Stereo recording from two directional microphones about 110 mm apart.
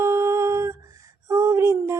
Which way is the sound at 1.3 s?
25° right (ahead or behind).